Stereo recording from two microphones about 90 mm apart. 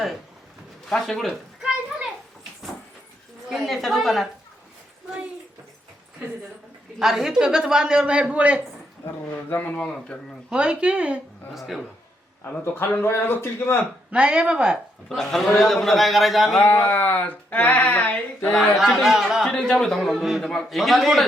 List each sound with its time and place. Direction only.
0.9 s a sound: 5° left (ahead or behind)
3.5 s a man's voice: centre (ahead or behind)
7.0 s a woman's voice: 5° right (ahead or behind)
9.5 s speech: 20° left (ahead or behind)
10.5 s a woman's voice: 10° right (ahead or behind)
11.5 s a man's voice: centre (ahead or behind)
12.5 s a sound: 20° left (ahead or behind)
14.1 s a woman's voice: 10° right (ahead or behind)
15.1 s a man's voice: 5° left (ahead or behind)
16.7 s a sound: 20° left (ahead or behind)
18.8 s a man's voice: centre (ahead or behind)
19.5 s a man's voice: 10° left (ahead or behind)